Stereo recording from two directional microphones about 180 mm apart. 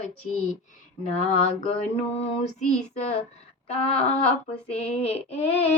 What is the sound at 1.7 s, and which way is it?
Child singing, 35° left (ahead or behind).